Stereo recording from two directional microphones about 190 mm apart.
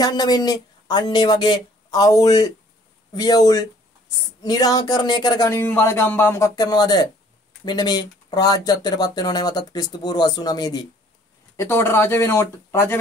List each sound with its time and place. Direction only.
0.0 s speech: 20° left (ahead or behind)